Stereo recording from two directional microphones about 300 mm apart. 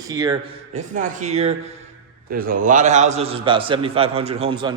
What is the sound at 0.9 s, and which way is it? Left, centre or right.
A man's voice, right.